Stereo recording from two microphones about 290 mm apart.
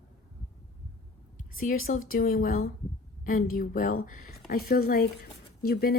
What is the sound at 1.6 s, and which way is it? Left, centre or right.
Speech, left.